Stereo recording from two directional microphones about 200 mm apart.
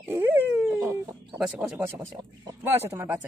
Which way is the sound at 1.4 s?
5° right (ahead or behind).